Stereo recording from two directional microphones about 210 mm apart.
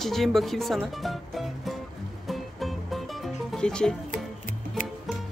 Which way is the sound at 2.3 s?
Centre (ahead or behind).